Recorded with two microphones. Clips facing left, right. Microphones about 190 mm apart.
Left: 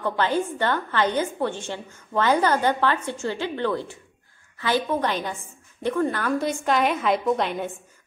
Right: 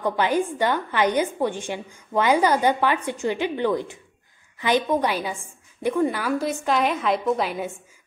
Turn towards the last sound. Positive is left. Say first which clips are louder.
# even
turn(degrees=-5)  # may be behind; listen again after turning